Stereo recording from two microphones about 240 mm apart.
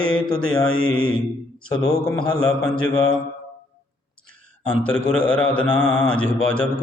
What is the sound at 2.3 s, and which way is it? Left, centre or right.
Mantra, centre.